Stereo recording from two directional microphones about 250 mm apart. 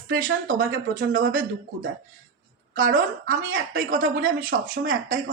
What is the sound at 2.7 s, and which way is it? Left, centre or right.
Speech, right.